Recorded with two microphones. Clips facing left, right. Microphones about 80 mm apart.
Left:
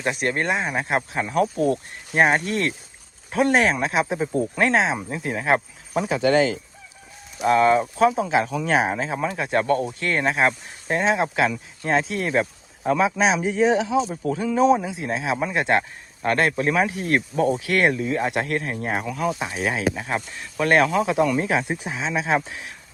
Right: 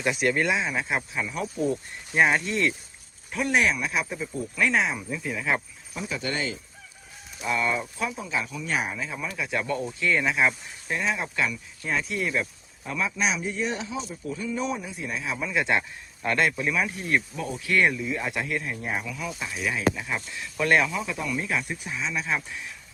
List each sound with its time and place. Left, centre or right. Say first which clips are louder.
0.0 s speech: left 1 dB; left
2.1 s speech: left 3 dB; left
3.3 s speech: left 5 dB; left
4.9 s speech: left 4 dB; left
7.3 s speech: left 10 dB; left
15.4 s speech: left 2 dB; left
16.2 s speech: left 4 dB; left
16.7 s speech: left 5 dB; left
17.3 s speech: left 5 dB; left
17.9 s speech: left 6 dB; left
19.5 s speech: left 4 dB; left
20.4 s speech: left 2 dB; left
20.7 s speech: left 9 dB; left